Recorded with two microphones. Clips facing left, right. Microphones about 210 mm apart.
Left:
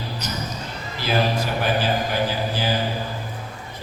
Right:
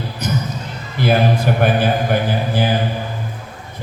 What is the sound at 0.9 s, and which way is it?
A man's voice, 55° right (ahead or behind).